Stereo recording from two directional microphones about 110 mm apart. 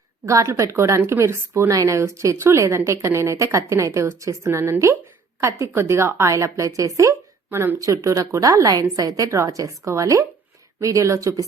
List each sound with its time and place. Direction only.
0.3 s a woman's voice: 30° right (ahead or behind)